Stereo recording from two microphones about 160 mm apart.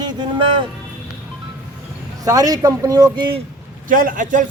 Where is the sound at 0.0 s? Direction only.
25° right (ahead or behind).